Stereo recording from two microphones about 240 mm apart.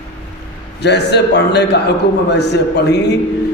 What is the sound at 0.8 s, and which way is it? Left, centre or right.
Chant, left.